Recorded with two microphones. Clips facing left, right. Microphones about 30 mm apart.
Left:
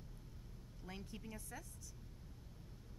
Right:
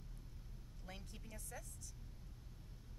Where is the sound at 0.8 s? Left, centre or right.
Centre.